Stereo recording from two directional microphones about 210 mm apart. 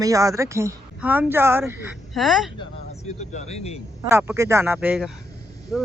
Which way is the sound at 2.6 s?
30° left (ahead or behind).